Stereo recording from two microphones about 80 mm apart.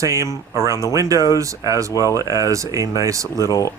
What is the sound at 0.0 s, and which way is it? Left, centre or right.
Speech, right.